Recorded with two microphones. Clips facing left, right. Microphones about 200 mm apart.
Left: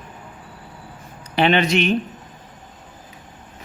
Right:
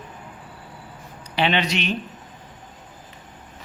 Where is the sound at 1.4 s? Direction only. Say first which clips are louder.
Left 5 dB; 50° left (ahead or behind).